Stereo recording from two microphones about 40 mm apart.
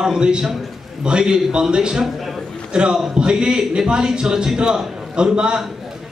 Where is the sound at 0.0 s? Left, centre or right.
Right.